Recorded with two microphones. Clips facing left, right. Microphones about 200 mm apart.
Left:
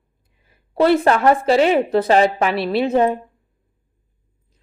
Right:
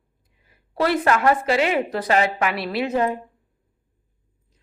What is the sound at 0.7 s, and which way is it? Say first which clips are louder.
Speech: left 5 dB; 25° left (ahead or behind).